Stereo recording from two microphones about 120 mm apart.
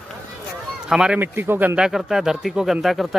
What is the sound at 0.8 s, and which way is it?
Speech, 5° right (ahead or behind).